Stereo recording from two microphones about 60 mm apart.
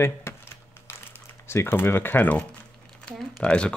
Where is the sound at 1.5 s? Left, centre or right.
Left.